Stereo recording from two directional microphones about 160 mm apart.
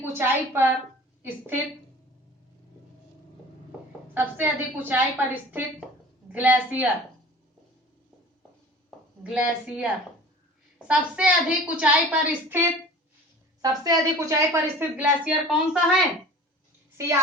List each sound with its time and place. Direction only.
0.0 s a woman's voice: 15° right (ahead or behind)
4.1 s a woman's voice: 10° right (ahead or behind)
9.2 s a woman's voice: 10° right (ahead or behind)
13.6 s a woman's voice: 20° right (ahead or behind); by 16.0 s centre (ahead or behind)